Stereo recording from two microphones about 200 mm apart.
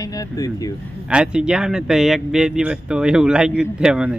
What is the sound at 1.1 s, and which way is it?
Speech, 5° right (ahead or behind).